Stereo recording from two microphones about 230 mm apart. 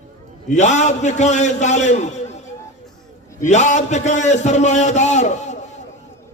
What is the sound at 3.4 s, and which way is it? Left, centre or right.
A man's voice, left.